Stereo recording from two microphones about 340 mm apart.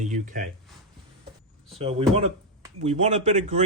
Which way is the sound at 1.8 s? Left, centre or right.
Centre.